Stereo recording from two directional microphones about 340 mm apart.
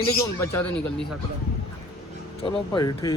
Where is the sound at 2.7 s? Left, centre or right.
Centre.